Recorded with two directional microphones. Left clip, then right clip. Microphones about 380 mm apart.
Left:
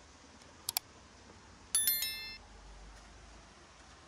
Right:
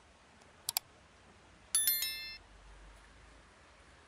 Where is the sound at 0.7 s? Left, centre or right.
Centre.